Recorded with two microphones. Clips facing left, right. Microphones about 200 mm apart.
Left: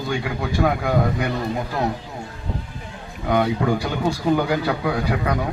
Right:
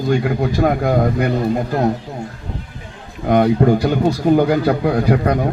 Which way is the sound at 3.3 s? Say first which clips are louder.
Right 6 dB; 45° right (ahead or behind).